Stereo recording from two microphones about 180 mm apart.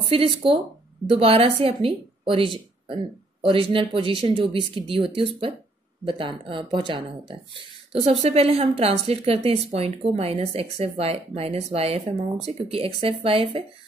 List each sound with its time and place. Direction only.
0.1 s speech: 30° right (ahead or behind)
8.2 s speech: 35° right (ahead or behind)